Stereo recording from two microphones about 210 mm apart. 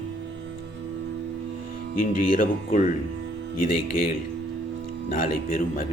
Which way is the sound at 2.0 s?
40° left (ahead or behind).